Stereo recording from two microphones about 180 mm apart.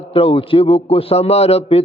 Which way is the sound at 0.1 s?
30° left (ahead or behind).